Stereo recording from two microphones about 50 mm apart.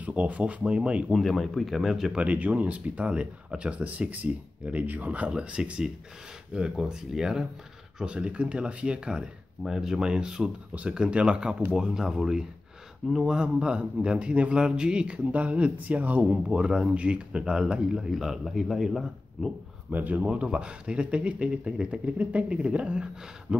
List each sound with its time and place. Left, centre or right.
0.0 s a man's voice: right
1.1 s speech: centre
2.1 s a man's voice: right
5.3 s a man's voice: centre
8.0 s a man's voice: right
10.7 s a man's voice: right; by 19.5 s centre
19.9 s speech: right
20.2 s a man's voice: right